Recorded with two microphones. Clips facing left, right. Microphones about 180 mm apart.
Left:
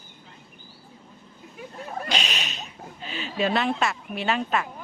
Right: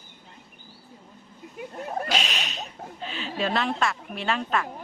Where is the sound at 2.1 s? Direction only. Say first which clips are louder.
Right 1 dB; centre (ahead or behind).